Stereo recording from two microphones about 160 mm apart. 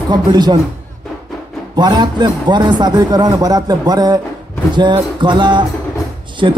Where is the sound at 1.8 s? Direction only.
25° right (ahead or behind).